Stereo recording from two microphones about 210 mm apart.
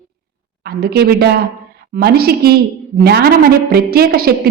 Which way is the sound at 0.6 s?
50° right (ahead or behind).